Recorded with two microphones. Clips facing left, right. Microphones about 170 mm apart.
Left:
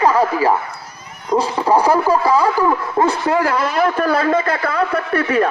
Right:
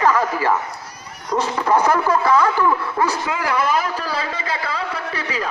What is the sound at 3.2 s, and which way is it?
A man's voice, 45° left (ahead or behind).